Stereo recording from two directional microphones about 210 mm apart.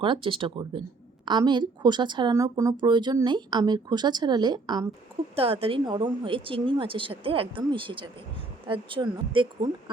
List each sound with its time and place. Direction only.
0.0 s a woman's voice: 25° right (ahead or behind)